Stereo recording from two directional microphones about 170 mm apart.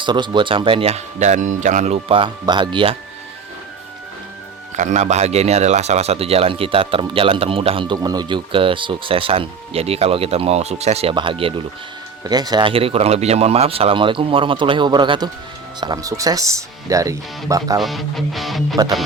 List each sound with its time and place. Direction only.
0.0 s speech: 25° right (ahead or behind)
4.8 s speech: 45° right (ahead or behind); by 17.7 s 20° right (ahead or behind)
17.7 s speech: centre (ahead or behind)